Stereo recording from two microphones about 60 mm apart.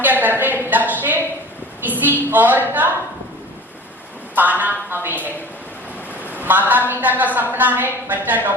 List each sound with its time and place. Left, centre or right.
0.0 s a sound: right
4.4 s a woman's voice: right
6.4 s a woman's voice: right